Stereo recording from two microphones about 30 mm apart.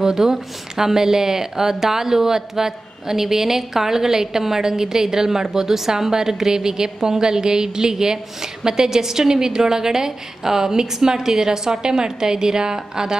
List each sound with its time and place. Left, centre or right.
0.0 s speech: centre